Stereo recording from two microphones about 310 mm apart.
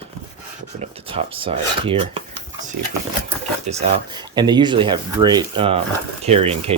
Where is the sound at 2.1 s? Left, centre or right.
Centre.